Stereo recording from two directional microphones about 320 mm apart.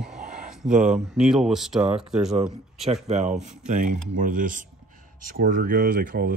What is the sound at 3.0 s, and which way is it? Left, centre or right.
Speech, right.